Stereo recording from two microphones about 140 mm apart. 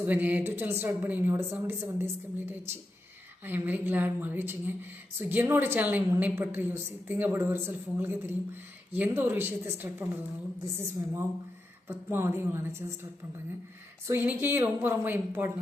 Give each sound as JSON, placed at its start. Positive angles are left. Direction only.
{"t": 0.0, "sound": "a woman's voice", "side_deg": -10}
{"t": 14.1, "sound": "speech", "side_deg": -15}